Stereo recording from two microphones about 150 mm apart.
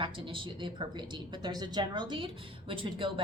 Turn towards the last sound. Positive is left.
turn(degrees=-35)  # may be behind; listen again after turning